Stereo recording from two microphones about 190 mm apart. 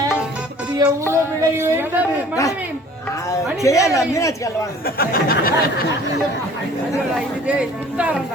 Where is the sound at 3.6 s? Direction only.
15° left (ahead or behind).